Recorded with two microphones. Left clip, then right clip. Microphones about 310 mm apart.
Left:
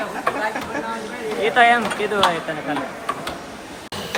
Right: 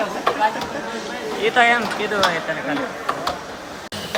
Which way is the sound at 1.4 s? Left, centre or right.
Centre.